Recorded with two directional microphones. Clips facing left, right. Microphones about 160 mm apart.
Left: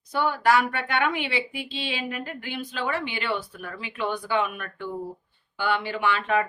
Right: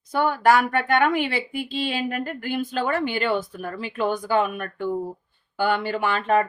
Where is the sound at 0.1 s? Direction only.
50° right (ahead or behind).